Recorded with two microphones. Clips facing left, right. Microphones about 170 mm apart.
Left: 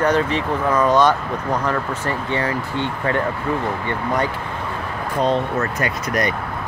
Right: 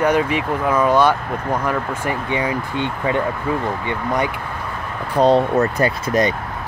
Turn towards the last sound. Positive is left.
turn(degrees=-30)  # may be behind; listen again after turning